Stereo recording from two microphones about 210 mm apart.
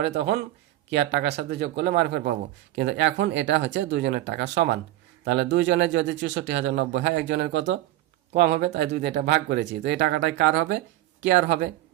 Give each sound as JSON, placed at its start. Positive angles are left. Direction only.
{"t": 0.0, "sound": "speech", "side_deg": -50}